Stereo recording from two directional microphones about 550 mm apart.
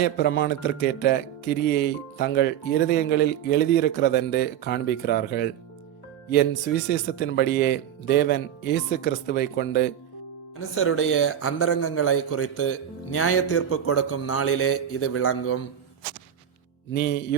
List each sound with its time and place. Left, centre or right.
0.0 s a man's voice: centre
16.9 s speech: centre